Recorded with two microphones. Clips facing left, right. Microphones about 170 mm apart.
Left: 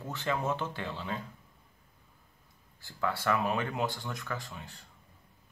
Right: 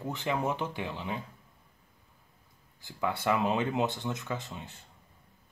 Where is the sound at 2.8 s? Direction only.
20° right (ahead or behind).